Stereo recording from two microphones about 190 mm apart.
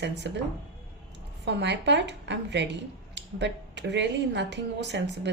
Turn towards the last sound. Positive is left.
turn(degrees=-65)  # may be behind; listen again after turning